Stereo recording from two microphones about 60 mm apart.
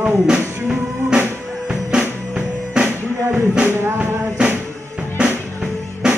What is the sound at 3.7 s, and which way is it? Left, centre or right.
Music, right.